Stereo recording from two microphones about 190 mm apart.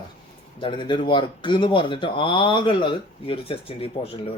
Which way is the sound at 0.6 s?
25° left (ahead or behind).